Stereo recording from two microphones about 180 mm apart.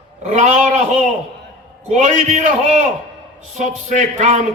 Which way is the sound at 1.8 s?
40° right (ahead or behind).